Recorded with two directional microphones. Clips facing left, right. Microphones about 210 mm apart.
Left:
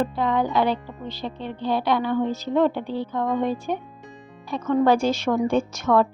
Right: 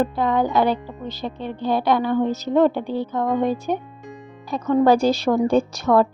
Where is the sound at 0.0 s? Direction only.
45° right (ahead or behind).